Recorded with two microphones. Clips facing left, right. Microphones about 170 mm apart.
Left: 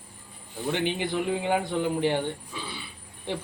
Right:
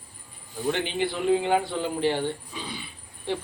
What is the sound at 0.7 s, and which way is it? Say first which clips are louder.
Speech: left 2 dB; 15° left (ahead or behind).